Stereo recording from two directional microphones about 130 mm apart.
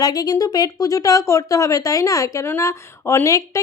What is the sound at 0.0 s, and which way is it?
A woman's voice, 30° left (ahead or behind).